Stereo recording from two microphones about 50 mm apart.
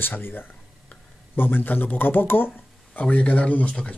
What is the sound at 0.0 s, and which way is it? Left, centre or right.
Speech, left.